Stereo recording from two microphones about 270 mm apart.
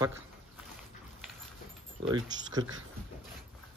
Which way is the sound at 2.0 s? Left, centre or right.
Centre.